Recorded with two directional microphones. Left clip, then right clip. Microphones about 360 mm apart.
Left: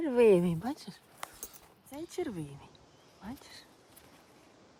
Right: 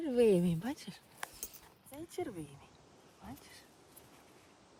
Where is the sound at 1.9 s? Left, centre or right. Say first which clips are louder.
Left 4 dB; left.